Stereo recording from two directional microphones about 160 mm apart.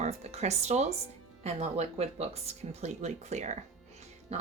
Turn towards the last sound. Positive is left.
turn(degrees=-40)  # may be behind; listen again after turning